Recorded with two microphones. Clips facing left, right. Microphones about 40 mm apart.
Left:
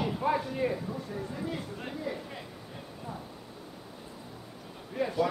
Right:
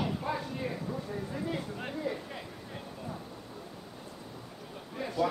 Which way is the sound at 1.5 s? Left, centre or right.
Centre.